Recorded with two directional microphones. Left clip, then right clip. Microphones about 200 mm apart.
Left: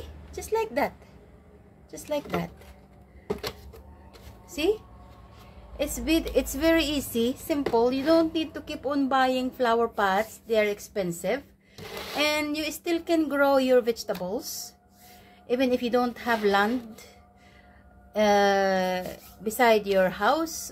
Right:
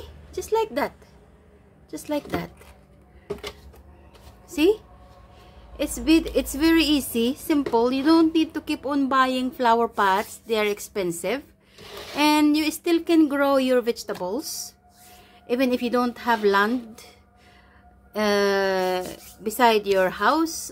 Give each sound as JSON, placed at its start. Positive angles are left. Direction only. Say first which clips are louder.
{"t": 0.3, "sound": "a woman's voice", "louder": "right 4 dB", "side_deg": -25}
{"t": 4.5, "sound": "a woman's voice", "louder": "right 6 dB", "side_deg": -30}
{"t": 5.8, "sound": "a woman's voice", "louder": "right 5 dB", "side_deg": -25}
{"t": 18.1, "sound": "a woman's voice", "louder": "even", "side_deg": -25}